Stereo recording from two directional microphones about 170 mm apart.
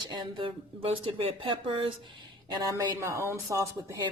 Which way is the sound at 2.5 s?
25° right (ahead or behind).